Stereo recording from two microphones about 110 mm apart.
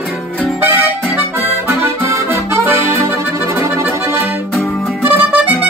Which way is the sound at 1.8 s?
25° right (ahead or behind).